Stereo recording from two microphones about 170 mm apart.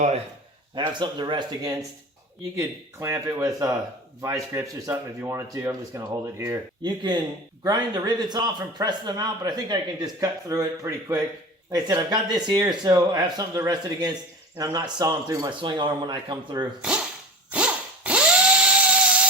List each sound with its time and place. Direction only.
0.8 s a man's voice: 25° right (ahead or behind)
17.5 s drill: 5° right (ahead or behind)
18.9 s wood: 5° right (ahead or behind)